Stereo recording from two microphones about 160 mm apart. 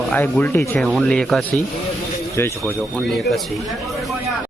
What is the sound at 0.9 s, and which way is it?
Speech, 5° left (ahead or behind).